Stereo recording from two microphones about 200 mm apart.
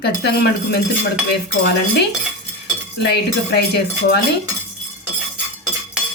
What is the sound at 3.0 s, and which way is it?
Speech, 55° left (ahead or behind).